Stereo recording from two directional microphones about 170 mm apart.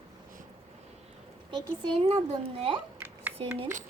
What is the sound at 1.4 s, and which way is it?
A woman's voice, 25° right (ahead or behind).